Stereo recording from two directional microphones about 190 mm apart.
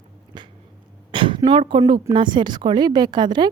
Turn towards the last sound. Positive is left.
turn(degrees=-25)  # may be behind; listen again after turning